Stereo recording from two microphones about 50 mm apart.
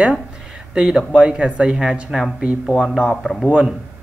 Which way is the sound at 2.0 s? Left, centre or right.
Centre.